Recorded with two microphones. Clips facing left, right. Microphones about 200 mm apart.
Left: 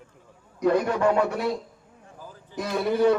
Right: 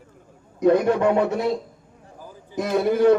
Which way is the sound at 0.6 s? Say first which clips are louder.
Right 4 dB; 25° right (ahead or behind).